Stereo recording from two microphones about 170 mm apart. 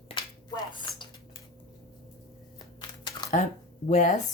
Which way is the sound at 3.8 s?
45° left (ahead or behind).